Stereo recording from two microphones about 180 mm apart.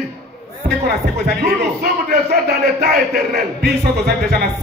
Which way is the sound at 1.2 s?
60° right (ahead or behind).